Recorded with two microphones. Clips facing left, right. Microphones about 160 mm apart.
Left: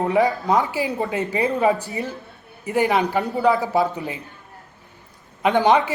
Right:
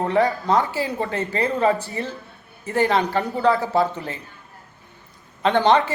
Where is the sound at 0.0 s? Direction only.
5° left (ahead or behind).